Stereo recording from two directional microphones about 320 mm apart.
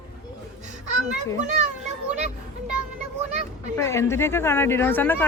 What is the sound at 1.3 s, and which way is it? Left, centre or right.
Speech, right.